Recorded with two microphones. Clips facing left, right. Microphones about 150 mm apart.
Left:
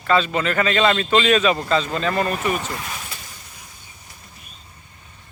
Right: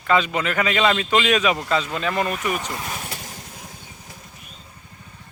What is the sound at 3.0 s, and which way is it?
Vehicle, 65° right (ahead or behind).